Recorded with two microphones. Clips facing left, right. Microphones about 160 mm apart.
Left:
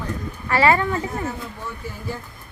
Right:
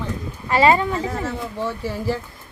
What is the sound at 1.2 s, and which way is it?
Speech, 85° right.